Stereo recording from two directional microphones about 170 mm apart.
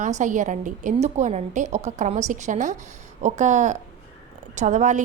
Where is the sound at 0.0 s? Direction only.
45° right (ahead or behind).